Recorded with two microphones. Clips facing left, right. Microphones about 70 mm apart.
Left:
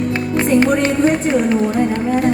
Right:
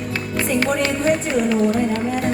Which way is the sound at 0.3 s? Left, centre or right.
Left.